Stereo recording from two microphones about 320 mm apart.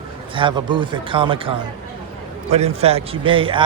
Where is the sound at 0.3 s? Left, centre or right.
Centre.